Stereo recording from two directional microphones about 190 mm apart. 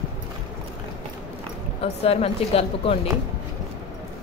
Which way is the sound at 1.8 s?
30° left (ahead or behind).